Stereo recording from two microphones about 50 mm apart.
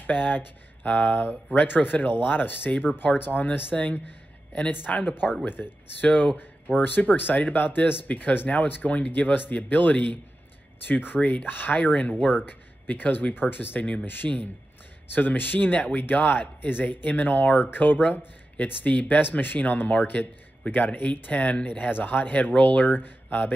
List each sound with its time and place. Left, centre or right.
0.0 s speech: left
5.6 s speech: left
6.3 s speech: left
11.1 s speech: left
13.7 s speech: left
14.0 s speech: left